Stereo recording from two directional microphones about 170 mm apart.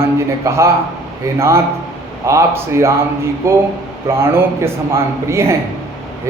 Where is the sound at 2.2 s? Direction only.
15° right (ahead or behind).